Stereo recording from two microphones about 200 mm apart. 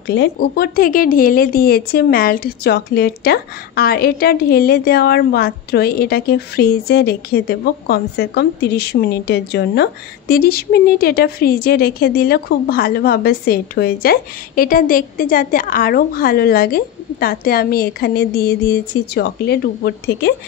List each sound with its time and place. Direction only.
0.0 s speech: 55° left (ahead or behind)